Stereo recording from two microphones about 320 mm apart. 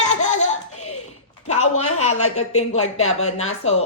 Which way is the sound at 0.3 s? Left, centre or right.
Left.